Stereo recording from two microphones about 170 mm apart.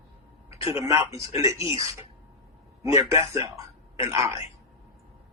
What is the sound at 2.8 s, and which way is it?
A man's voice, 20° right (ahead or behind).